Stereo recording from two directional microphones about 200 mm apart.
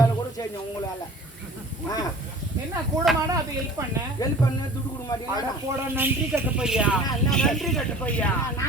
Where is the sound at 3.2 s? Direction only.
15° right (ahead or behind).